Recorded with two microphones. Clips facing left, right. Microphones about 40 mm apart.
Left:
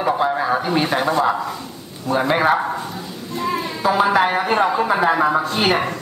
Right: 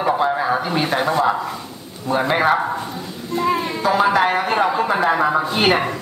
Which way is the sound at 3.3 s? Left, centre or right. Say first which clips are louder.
Right 3 dB; centre.